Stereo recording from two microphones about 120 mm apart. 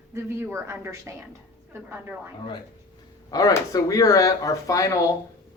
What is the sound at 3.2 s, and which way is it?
Speech, 30° left (ahead or behind).